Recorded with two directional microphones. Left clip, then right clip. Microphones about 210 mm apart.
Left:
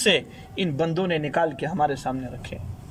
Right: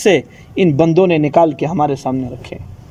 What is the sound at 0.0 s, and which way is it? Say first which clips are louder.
A man's voice: right 8 dB; 30° right (ahead or behind).